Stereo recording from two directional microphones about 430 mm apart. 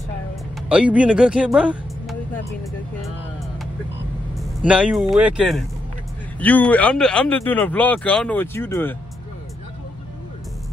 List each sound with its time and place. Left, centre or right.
0.6 s speech: centre
2.6 s music: centre
4.4 s speech: centre